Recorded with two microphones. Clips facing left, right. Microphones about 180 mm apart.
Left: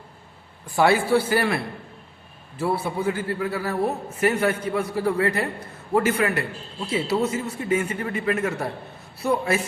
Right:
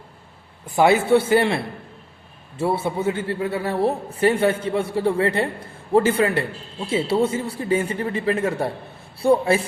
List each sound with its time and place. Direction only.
0.8 s a man's voice: 20° right (ahead or behind)